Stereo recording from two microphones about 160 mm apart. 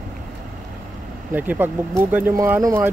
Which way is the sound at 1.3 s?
10° right (ahead or behind).